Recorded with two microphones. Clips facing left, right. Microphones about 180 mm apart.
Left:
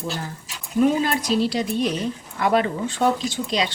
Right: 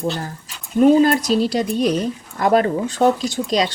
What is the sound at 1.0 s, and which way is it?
Speech, 40° right (ahead or behind).